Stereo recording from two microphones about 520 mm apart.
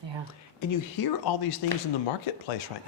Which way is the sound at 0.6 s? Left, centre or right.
Left.